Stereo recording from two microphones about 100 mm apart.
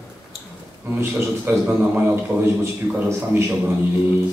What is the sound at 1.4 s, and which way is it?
A man's voice, 20° right (ahead or behind).